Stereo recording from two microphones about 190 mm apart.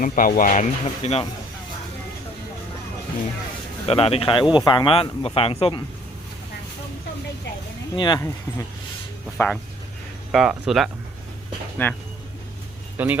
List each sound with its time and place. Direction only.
0.0 s speech: 45° left (ahead or behind)
3.8 s speech: 30° left (ahead or behind)
7.9 s speech: 25° left (ahead or behind)
10.3 s speech: centre (ahead or behind)
11.8 s speech: 10° left (ahead or behind)
13.0 s speech: 10° right (ahead or behind)